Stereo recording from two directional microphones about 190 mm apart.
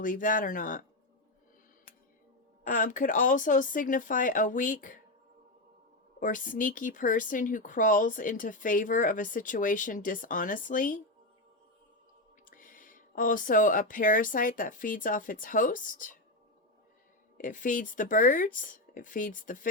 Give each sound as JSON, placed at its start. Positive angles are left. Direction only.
{"t": 0.0, "sound": "speech", "side_deg": 45}
{"t": 2.6, "sound": "speech", "side_deg": 45}
{"t": 6.1, "sound": "speech", "side_deg": 45}
{"t": 12.5, "sound": "speech", "side_deg": 45}
{"t": 17.3, "sound": "speech", "side_deg": 45}